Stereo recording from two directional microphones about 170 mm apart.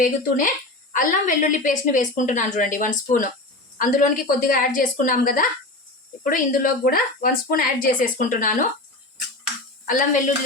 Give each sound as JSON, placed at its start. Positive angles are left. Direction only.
{"t": 0.0, "sound": "a woman's voice", "side_deg": 55}
{"t": 9.8, "sound": "a woman's voice", "side_deg": 50}